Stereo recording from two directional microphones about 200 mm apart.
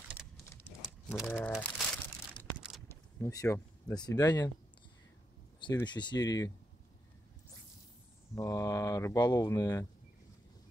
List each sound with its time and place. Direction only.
1.2 s speech: 10° left (ahead or behind)
2.9 s speech: 15° left (ahead or behind)
5.6 s speech: 20° left (ahead or behind)
8.4 s speech: 15° left (ahead or behind)